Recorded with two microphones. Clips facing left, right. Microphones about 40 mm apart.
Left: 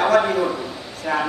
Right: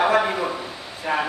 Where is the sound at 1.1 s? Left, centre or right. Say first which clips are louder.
Left 1 dB; centre.